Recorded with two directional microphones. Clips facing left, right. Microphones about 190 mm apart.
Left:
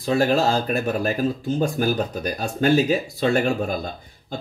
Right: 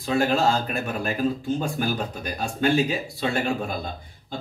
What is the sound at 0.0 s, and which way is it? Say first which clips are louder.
Speech: left 2 dB; 40° left (ahead or behind).